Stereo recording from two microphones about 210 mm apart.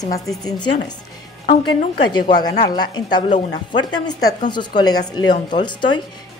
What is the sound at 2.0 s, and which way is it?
A woman's voice, 20° left (ahead or behind).